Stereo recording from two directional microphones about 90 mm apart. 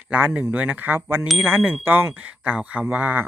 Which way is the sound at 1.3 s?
Centre (ahead or behind).